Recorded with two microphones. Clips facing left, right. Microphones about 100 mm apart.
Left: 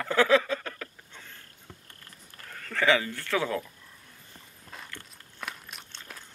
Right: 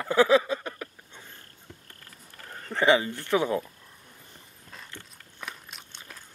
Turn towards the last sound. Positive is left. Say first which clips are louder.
# left 1 dB
turn(degrees=0)  # may be behind; listen again after turning